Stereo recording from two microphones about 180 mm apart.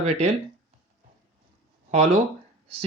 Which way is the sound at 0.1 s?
40° right (ahead or behind).